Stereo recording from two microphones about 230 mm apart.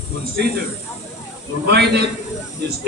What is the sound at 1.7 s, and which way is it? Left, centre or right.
Speech, right.